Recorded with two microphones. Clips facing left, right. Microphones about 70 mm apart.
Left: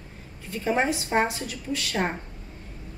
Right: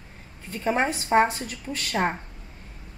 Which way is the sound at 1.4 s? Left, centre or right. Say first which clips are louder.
Left 2 dB; right.